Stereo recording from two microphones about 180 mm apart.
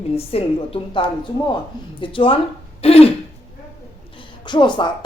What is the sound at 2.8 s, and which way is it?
Throat clearing, 35° left (ahead or behind).